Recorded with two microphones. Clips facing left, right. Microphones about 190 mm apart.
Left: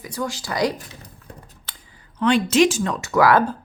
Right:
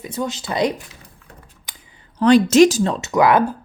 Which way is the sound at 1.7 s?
15° right (ahead or behind).